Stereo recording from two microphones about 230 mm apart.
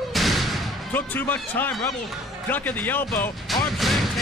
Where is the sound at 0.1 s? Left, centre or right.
Centre.